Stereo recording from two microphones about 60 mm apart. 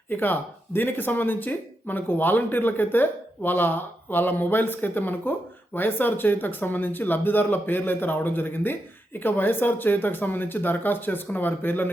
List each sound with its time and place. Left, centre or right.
0.1 s speech: left